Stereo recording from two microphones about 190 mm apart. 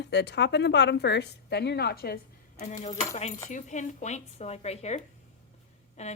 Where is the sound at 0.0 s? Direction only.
65° left (ahead or behind).